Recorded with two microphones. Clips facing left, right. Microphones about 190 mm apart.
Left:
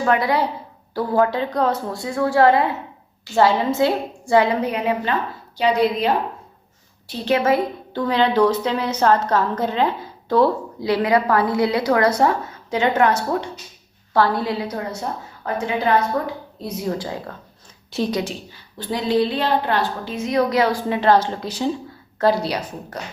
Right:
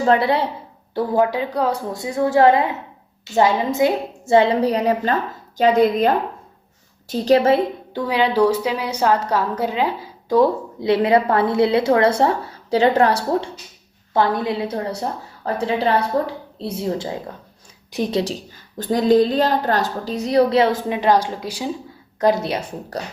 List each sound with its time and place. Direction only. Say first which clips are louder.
0.0 s a woman's voice: right 2 dB; 30° right (ahead or behind)
0.9 s a woman's voice: right 1 dB; 15° right (ahead or behind); by 6.1 s 50° right (ahead or behind)
7.1 s a woman's voice: right 4 dB; 35° right (ahead or behind)
7.9 s a woman's voice: even; 10° right (ahead or behind); by 13.5 s 35° right (ahead or behind)
14.1 s a woman's voice: even; 20° right (ahead or behind)
18.2 s a woman's voice: right 3 dB; 40° right (ahead or behind); by 22.7 s 25° right (ahead or behind)